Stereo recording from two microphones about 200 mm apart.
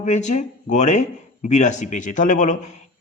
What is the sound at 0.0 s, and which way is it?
A man's voice, 35° left (ahead or behind).